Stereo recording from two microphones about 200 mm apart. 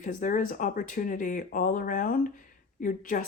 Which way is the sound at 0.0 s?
40° left (ahead or behind).